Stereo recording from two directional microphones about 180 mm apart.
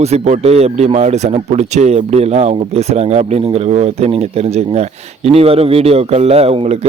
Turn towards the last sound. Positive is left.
turn(degrees=-35)  # may be behind; listen again after turning